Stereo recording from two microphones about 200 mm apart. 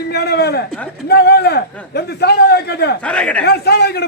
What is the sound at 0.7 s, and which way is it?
Speech, 5° left (ahead or behind).